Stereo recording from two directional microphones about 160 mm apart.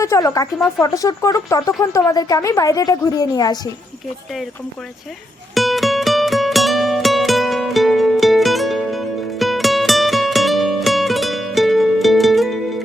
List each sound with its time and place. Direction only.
0.0 s speech: 20° left (ahead or behind)
5.5 s music: centre (ahead or behind)